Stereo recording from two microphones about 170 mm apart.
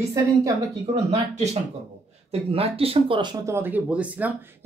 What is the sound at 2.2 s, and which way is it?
Speech, 35° right (ahead or behind).